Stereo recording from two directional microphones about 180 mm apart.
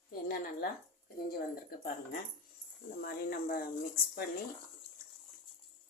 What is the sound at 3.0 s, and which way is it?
Speech, 55° left (ahead or behind).